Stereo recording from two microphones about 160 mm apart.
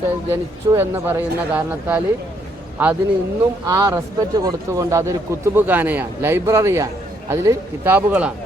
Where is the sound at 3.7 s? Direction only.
20° right (ahead or behind).